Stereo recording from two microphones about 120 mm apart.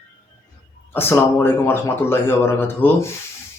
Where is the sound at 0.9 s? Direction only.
20° left (ahead or behind).